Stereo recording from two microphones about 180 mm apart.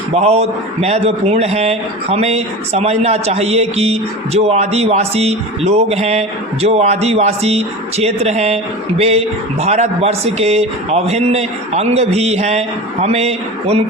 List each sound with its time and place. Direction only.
0.1 s a man's voice: 35° right (ahead or behind)